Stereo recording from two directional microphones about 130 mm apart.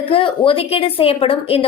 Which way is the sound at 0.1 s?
45° left (ahead or behind).